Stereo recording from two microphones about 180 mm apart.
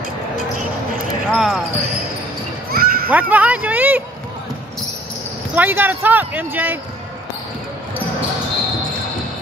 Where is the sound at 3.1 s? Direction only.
10° right (ahead or behind).